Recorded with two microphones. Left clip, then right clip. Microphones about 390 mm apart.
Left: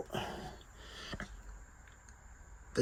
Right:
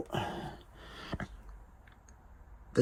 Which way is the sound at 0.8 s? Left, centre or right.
Centre.